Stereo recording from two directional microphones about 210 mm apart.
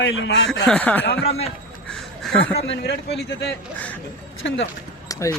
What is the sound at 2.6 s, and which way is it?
A man's voice, 55° left (ahead or behind).